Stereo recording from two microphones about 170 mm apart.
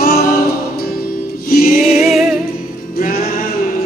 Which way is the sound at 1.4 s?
60° left (ahead or behind).